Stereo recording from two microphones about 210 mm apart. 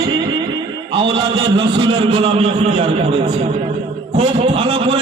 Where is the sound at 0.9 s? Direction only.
25° right (ahead or behind).